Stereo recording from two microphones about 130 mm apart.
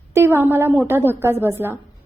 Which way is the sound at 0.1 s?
20° right (ahead or behind).